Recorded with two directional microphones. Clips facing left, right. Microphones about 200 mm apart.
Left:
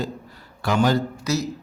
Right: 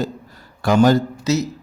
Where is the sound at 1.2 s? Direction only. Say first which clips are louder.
Right 6 dB; 20° right (ahead or behind).